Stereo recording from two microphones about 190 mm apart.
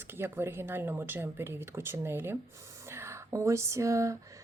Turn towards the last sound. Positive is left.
turn(degrees=-15)  # may be behind; listen again after turning